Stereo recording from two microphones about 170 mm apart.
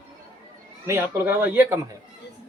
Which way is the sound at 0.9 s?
10° right (ahead or behind).